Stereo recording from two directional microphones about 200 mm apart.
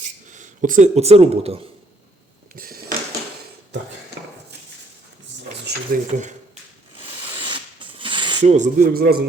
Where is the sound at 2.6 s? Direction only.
45° right (ahead or behind).